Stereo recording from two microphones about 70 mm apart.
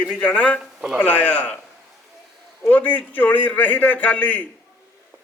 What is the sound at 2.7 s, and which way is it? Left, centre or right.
A man's voice, left.